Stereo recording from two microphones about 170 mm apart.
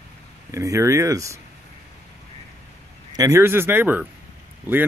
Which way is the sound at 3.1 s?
20° right (ahead or behind).